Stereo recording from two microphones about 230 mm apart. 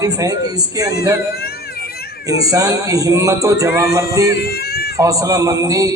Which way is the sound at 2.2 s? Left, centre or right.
Centre.